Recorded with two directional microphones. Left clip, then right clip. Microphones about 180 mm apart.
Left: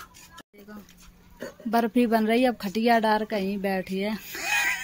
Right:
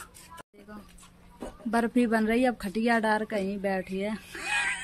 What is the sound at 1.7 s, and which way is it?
A woman's voice, 15° left (ahead or behind).